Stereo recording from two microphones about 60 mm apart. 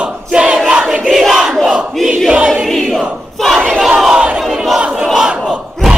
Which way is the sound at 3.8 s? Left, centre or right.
Centre.